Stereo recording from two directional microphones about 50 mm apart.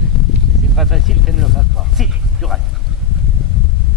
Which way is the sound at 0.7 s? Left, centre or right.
Centre.